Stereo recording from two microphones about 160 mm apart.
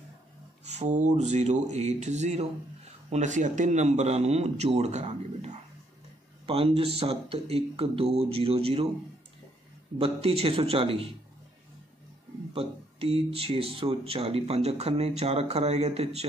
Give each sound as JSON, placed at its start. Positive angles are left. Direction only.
{"t": 0.7, "sound": "speech", "side_deg": -45}
{"t": 9.9, "sound": "speech", "side_deg": -40}
{"t": 12.5, "sound": "speech", "side_deg": -35}